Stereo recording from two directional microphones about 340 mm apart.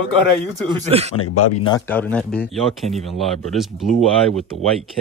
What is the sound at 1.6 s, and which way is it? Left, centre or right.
Speech, centre.